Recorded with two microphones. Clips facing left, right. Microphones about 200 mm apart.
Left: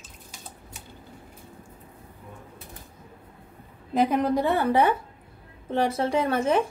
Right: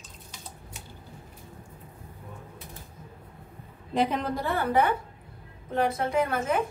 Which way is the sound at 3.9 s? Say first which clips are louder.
Left 3 dB; 5° left (ahead or behind).